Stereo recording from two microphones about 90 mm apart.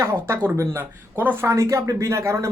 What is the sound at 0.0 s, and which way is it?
Speech, 30° right (ahead or behind).